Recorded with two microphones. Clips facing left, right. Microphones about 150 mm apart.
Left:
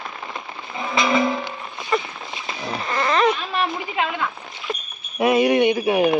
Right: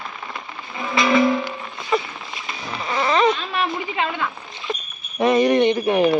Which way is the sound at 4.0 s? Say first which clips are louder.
Left 2 dB; 5° left (ahead or behind).